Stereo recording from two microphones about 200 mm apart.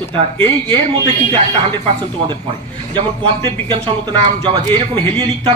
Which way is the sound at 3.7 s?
25° right (ahead or behind).